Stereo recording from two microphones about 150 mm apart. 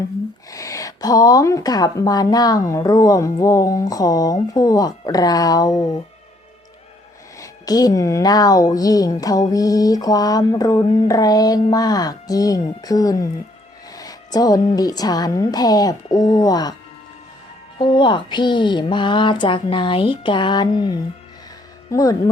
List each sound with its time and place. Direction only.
0.5 s speech: 20° left (ahead or behind)
7.3 s speech: 25° left (ahead or behind)
13.9 s a sound: 25° left (ahead or behind)
14.8 s speech: 25° left (ahead or behind)
17.7 s speech: 30° left (ahead or behind)